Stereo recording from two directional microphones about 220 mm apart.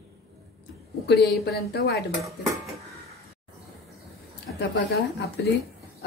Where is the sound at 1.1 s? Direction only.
Centre (ahead or behind).